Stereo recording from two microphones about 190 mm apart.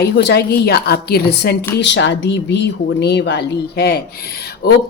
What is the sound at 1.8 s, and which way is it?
A woman's voice, 70° left (ahead or behind).